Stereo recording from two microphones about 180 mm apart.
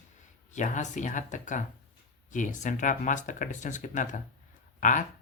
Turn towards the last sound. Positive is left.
turn(degrees=45)  # may be behind; listen again after turning